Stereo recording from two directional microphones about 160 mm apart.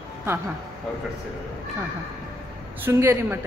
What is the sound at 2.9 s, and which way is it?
Speech, 15° right (ahead or behind).